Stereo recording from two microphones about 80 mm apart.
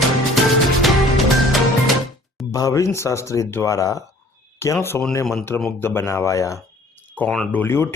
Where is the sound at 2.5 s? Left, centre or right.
Left.